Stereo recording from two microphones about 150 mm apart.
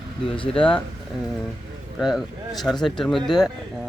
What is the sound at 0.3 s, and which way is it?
Speech, 35° left (ahead or behind).